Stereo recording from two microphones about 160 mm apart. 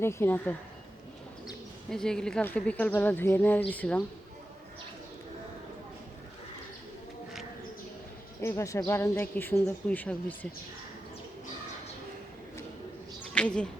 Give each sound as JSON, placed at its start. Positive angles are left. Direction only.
{"t": 0.0, "sound": "speech", "side_deg": 15}
{"t": 1.9, "sound": "speech", "side_deg": 5}
{"t": 8.4, "sound": "speech", "side_deg": 15}
{"t": 13.3, "sound": "speech", "side_deg": 5}